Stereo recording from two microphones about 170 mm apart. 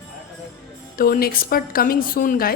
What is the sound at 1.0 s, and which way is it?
A woman's voice, 60° left (ahead or behind).